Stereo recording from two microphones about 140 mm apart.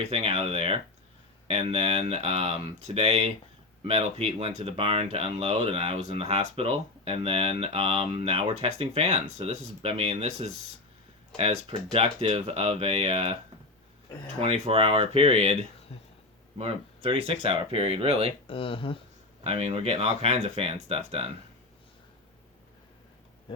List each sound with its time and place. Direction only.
0.0 s speech: 45° right (ahead or behind)
14.4 s speech: 45° right (ahead or behind)
15.9 s speech: 45° left (ahead or behind)
16.6 s speech: 45° right (ahead or behind)
18.4 s speech: 40° left (ahead or behind)
19.5 s speech: 45° right (ahead or behind)